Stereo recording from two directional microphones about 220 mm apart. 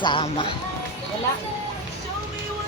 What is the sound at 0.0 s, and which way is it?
Speech, 25° left (ahead or behind).